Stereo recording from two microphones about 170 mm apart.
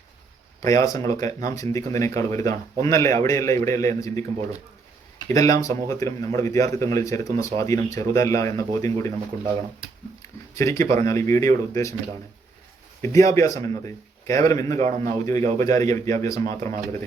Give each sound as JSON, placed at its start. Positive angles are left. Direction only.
{"t": 0.6, "sound": "a man's voice", "side_deg": 20}
{"t": 5.3, "sound": "speech", "side_deg": 20}
{"t": 10.5, "sound": "a man's voice", "side_deg": 15}
{"t": 13.0, "sound": "speech", "side_deg": 20}
{"t": 14.8, "sound": "a man's voice", "side_deg": -45}
{"t": 15.5, "sound": "speech", "side_deg": 20}
{"t": 16.4, "sound": "speech", "side_deg": -40}
{"t": 16.6, "sound": "a man's voice", "side_deg": 15}